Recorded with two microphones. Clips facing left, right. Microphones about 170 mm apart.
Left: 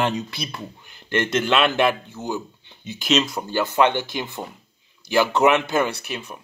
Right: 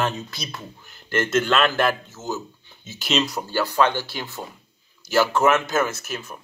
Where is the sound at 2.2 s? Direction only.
15° left (ahead or behind).